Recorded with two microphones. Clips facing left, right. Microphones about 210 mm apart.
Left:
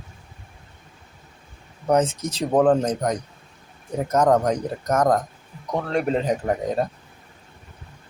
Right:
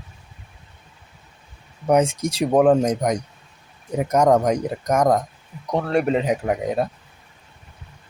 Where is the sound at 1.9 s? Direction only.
10° right (ahead or behind).